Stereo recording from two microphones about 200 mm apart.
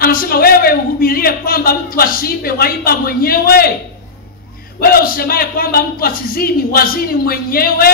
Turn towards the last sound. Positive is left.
turn(degrees=50)  # may be behind; listen again after turning